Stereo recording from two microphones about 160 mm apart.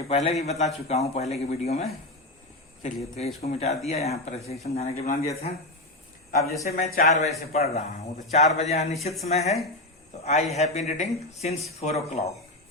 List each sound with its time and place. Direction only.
0.1 s speech: 40° left (ahead or behind)
6.4 s speech: 20° left (ahead or behind)
6.7 s speech: 45° left (ahead or behind)